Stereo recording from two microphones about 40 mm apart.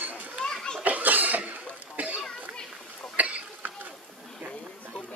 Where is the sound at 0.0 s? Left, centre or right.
Right.